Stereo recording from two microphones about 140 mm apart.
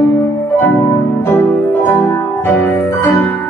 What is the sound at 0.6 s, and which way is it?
Music, 15° left (ahead or behind).